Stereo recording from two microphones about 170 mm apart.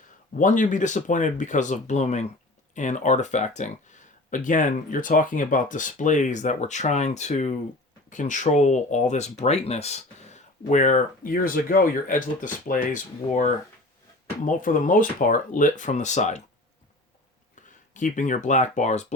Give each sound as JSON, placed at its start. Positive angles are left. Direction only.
{"t": 0.3, "sound": "speech", "side_deg": 50}
{"t": 17.5, "sound": "speech", "side_deg": 50}